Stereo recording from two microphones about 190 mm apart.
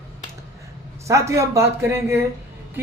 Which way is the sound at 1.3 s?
15° right (ahead or behind).